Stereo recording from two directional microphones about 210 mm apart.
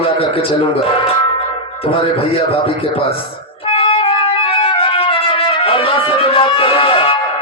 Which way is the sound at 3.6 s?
25° left (ahead or behind).